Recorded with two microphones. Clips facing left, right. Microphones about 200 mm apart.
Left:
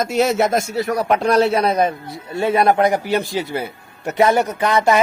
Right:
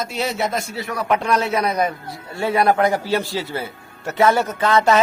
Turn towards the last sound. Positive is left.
turn(degrees=15)  # may be behind; listen again after turning